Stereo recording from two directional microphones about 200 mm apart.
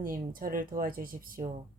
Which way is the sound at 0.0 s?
45° right (ahead or behind).